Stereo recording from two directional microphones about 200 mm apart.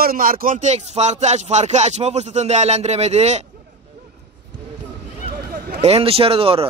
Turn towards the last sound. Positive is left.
turn(degrees=-30)  # may be behind; listen again after turning